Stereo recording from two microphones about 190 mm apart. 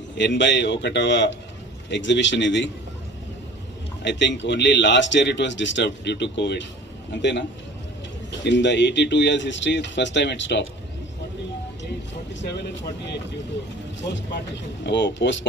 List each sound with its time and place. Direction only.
0.1 s speech: 70° left (ahead or behind)
4.0 s speech: 70° left (ahead or behind)
12.4 s speech: 65° left (ahead or behind)